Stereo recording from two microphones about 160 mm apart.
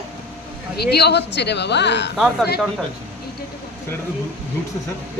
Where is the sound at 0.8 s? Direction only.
90° left.